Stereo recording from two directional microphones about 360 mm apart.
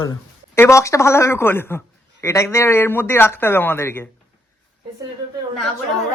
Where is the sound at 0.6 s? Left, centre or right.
Centre.